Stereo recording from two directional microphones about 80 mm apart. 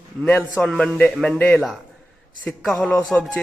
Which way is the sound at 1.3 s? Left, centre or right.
Left.